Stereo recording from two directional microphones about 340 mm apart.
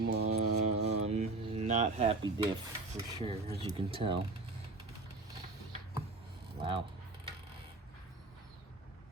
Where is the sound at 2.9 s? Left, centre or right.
Centre.